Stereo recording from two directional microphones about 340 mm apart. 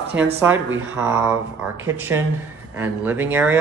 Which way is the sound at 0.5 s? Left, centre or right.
Right.